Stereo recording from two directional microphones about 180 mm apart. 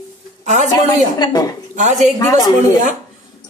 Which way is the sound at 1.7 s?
40° right (ahead or behind).